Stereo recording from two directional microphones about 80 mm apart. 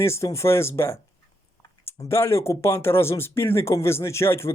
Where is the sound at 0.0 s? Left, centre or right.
Left.